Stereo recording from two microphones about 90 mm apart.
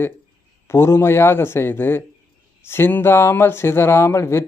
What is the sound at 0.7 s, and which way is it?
Speech, 30° left (ahead or behind).